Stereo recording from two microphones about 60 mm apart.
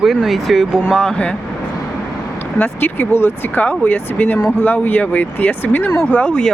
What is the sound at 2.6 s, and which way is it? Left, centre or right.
Speech, left.